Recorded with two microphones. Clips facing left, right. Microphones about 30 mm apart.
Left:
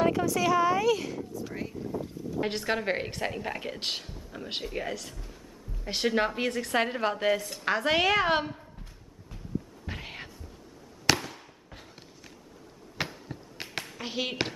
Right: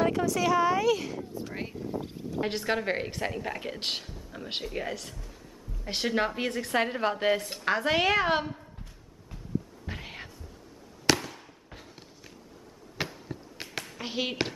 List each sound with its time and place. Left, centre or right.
0.0 s a woman's voice: centre
1.5 s boat: right
1.9 s boat: right
2.4 s a woman's voice: centre
4.1 s a sound: centre
4.6 s a woman's voice: centre
7.2 s speech: centre
7.6 s a woman's voice: centre
9.8 s cat: centre
11.1 s fireworks: centre
12.9 s a sound: centre
13.9 s speech: centre